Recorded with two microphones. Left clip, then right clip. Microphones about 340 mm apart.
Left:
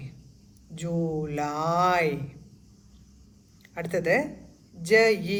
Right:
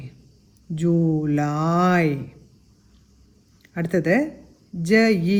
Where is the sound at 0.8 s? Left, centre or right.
Right.